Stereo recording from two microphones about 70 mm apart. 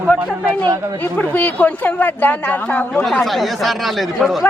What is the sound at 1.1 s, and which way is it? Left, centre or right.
Speech, left.